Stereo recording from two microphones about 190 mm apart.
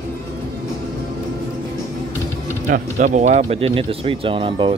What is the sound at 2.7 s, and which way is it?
Speech, 40° right (ahead or behind).